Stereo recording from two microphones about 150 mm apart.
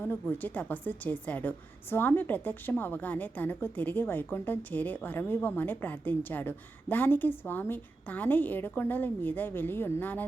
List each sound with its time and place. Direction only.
0.0 s a woman's voice: 10° left (ahead or behind)